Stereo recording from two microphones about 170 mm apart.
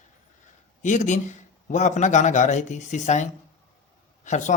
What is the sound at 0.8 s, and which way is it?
A man's voice, 45° left (ahead or behind).